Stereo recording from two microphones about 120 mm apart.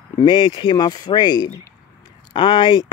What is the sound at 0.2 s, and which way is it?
Speech, 40° left (ahead or behind).